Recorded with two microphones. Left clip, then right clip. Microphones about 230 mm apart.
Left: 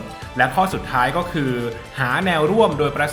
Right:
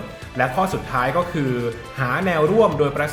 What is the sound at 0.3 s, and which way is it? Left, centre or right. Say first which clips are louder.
Speech: left 3 dB; centre.